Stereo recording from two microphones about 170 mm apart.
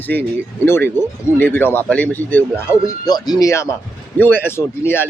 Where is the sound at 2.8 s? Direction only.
25° left (ahead or behind).